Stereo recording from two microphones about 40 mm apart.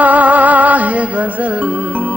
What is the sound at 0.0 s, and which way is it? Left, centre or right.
Music, right.